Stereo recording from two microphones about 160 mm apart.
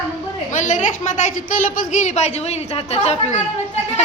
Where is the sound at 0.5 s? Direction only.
50° left (ahead or behind).